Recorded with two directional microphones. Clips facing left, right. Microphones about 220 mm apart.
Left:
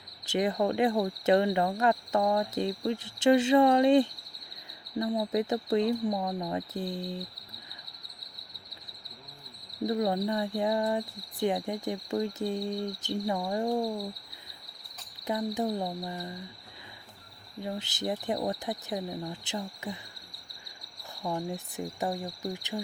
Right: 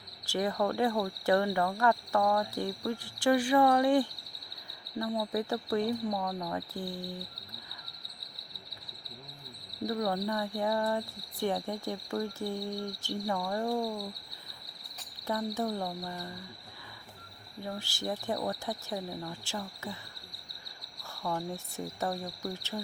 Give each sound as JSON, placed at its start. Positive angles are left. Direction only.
{"t": 0.3, "sound": "insect", "side_deg": 20}
{"t": 9.8, "sound": "insect", "side_deg": 20}
{"t": 15.3, "sound": "insect", "side_deg": 15}
{"t": 17.6, "sound": "insect", "side_deg": 20}
{"t": 21.2, "sound": "speech", "side_deg": 20}